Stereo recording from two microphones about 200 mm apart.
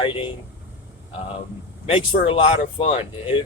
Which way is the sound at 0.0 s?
25° left (ahead or behind).